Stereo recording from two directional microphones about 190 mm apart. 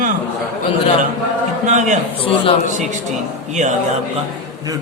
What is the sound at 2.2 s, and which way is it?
Speech, 30° left (ahead or behind).